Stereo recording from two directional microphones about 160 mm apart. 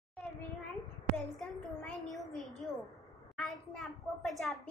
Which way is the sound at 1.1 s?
Centre (ahead or behind).